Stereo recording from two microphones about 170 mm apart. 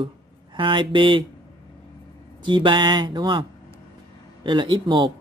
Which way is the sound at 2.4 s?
30° right (ahead or behind).